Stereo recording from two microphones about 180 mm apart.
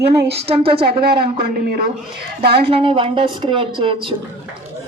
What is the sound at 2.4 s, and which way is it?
Speech, 60° right (ahead or behind).